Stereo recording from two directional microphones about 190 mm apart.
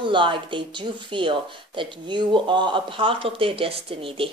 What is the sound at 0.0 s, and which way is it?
Speech, 25° right (ahead or behind).